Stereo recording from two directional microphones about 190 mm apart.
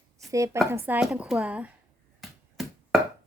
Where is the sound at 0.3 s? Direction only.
15° right (ahead or behind).